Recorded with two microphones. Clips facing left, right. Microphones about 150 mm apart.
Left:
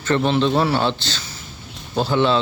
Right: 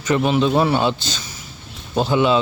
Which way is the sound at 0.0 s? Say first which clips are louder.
Right 1 dB; 10° right (ahead or behind).